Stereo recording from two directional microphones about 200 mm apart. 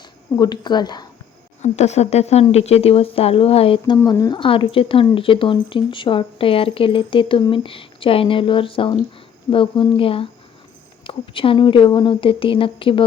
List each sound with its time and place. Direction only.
0.3 s speech: 20° left (ahead or behind)
1.6 s speech: 35° left (ahead or behind)